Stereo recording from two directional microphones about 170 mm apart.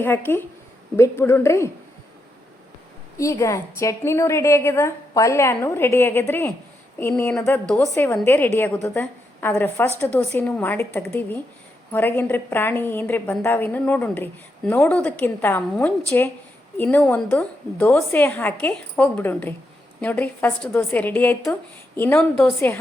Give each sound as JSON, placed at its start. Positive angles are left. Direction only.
{"t": 0.0, "sound": "a woman's voice", "side_deg": 10}
{"t": 3.2, "sound": "a woman's voice", "side_deg": 20}